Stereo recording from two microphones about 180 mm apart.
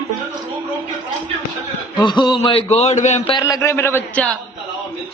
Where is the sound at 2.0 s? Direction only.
25° left (ahead or behind); by 3.3 s 40° left (ahead or behind).